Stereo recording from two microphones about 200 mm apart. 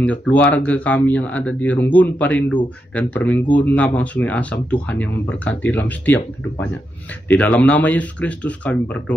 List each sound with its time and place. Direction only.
0.0 s speech: 5° left (ahead or behind)
7.2 s speech: 10° left (ahead or behind)